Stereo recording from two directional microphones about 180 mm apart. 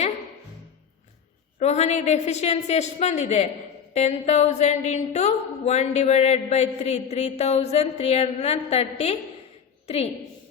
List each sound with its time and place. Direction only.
1.5 s a woman's voice: 40° left (ahead or behind)